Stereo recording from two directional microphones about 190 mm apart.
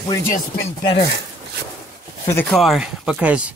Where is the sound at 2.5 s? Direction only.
Centre (ahead or behind).